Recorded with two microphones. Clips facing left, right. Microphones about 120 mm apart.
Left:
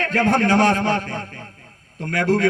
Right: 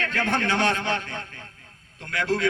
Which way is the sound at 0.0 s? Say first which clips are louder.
Left 7 dB; 40° left (ahead or behind).